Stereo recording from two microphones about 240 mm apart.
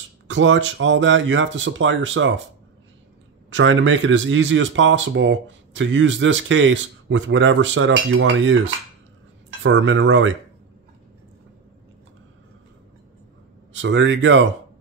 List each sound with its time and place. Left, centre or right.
0.3 s speech: right
3.4 s speech: right
9.6 s speech: right
13.7 s speech: right